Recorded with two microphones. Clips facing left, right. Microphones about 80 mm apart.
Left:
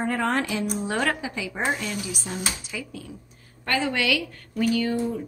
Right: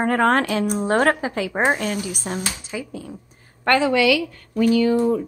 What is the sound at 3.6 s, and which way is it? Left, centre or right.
Speech, right.